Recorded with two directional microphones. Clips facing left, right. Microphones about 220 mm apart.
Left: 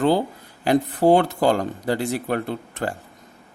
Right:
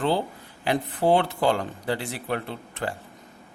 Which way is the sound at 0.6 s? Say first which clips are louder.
Left 6 dB; 40° left (ahead or behind).